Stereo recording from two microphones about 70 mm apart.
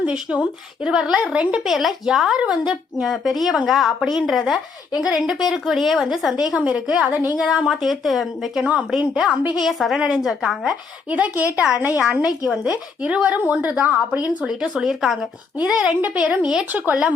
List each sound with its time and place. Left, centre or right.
0.3 s speech: centre
1.6 s speech: centre
3.0 s a woman's voice: centre; by 7.3 s right
7.3 s a woman's voice: centre
9.1 s a woman's voice: centre
9.6 s a woman's voice: centre
11.1 s a woman's voice: right; by 15.3 s centre
15.6 s a woman's voice: centre